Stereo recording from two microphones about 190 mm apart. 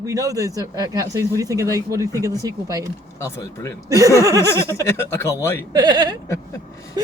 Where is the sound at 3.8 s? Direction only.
15° right (ahead or behind).